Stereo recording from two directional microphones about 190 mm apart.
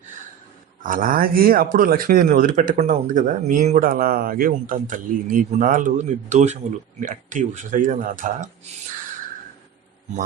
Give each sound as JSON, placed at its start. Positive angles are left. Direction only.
{"t": 0.8, "sound": "speech", "side_deg": -45}